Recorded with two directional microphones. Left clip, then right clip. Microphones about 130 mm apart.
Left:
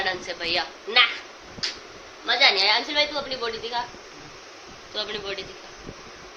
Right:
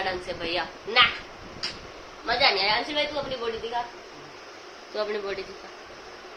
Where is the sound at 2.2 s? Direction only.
10° left (ahead or behind).